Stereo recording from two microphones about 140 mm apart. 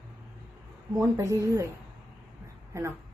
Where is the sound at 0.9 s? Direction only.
20° right (ahead or behind).